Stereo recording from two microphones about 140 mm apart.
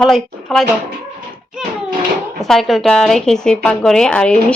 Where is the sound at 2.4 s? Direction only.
Centre (ahead or behind).